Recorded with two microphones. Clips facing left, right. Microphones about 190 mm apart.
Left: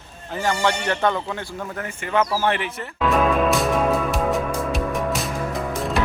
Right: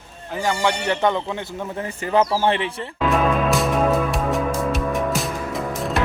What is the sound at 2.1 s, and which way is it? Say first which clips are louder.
Speech: right 2 dB; 25° right (ahead or behind).